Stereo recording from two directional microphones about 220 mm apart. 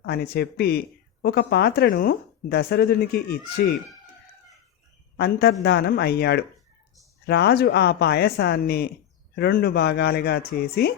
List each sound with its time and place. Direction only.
0.0 s speech: 45° left (ahead or behind)
5.1 s speech: 45° left (ahead or behind)